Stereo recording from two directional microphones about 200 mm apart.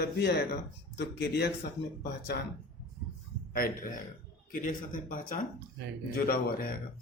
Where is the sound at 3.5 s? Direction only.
45° left (ahead or behind).